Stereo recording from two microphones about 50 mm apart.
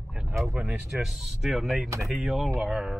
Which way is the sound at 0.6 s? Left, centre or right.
Right.